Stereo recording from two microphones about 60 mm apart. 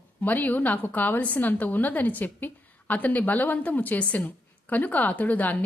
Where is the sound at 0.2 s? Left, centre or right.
Left.